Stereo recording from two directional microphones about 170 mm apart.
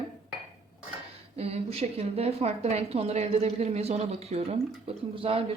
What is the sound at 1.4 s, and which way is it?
Speech, 35° right (ahead or behind).